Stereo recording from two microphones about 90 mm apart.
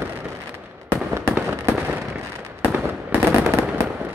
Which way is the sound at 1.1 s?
30° right (ahead or behind).